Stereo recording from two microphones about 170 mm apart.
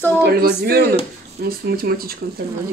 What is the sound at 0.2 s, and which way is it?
Speech, 65° right (ahead or behind).